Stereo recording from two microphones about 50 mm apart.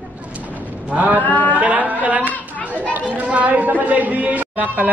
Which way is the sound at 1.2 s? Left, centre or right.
Left.